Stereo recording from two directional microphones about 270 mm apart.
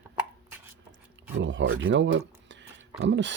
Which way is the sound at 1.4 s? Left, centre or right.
Right.